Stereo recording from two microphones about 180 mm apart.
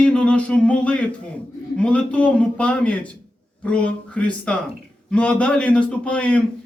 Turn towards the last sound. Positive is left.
turn(degrees=5)  # may be behind; listen again after turning